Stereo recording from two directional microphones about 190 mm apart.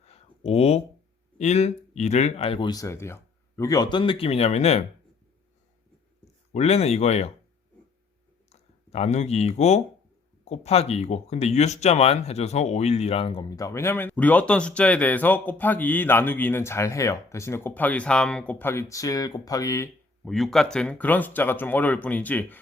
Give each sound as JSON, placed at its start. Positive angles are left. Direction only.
{"t": 0.0, "sound": "a sound", "side_deg": 30}
{"t": 1.4, "sound": "speech", "side_deg": 35}
{"t": 6.5, "sound": "speech", "side_deg": 35}
{"t": 8.4, "sound": "speech", "side_deg": 35}
{"t": 20.2, "sound": "speech", "side_deg": 0}